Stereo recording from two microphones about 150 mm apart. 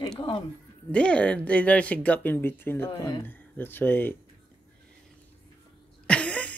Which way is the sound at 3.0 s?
30° left (ahead or behind).